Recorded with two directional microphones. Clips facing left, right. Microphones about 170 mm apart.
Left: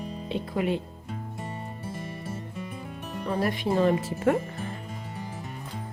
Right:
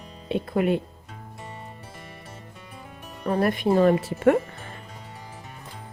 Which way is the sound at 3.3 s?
50° right (ahead or behind).